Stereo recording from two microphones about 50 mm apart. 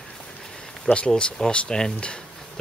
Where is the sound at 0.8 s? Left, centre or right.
Left.